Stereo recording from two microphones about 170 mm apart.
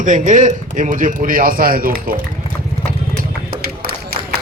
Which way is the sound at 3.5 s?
65° right (ahead or behind).